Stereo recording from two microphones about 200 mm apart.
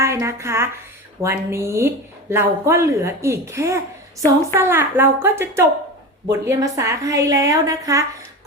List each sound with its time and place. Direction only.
0.0 s a woman's voice: 15° right (ahead or behind)